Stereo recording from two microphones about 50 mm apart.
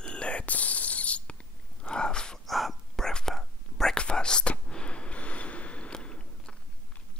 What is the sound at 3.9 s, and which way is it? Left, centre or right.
Whispering, centre.